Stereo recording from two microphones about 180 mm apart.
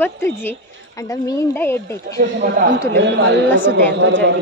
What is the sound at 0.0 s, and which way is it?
A woman's voice, 10° left (ahead or behind).